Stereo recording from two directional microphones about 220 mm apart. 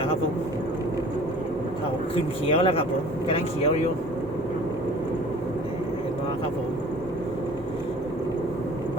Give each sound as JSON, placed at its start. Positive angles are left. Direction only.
{"t": 2.1, "sound": "speech", "side_deg": 25}